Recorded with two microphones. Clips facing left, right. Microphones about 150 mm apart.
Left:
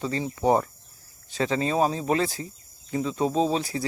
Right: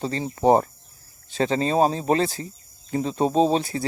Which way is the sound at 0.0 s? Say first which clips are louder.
Right 3 dB; 30° right (ahead or behind).